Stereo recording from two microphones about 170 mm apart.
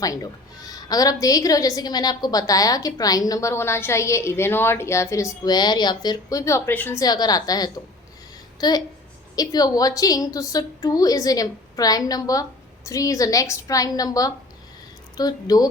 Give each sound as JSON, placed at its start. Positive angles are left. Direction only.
{"t": 0.0, "sound": "a woman's voice", "side_deg": 20}